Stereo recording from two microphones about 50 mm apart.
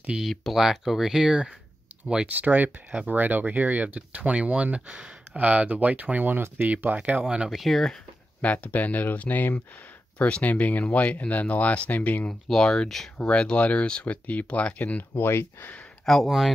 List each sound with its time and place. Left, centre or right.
0.1 s speech: centre
2.3 s speech: right
6.3 s speech: right
7.2 s speech: centre
7.5 s speech: centre
8.4 s speech: left
10.1 s speech: centre
10.4 s speech: left
12.4 s speech: centre
13.2 s speech: centre
15.1 s speech: left
16.1 s speech: centre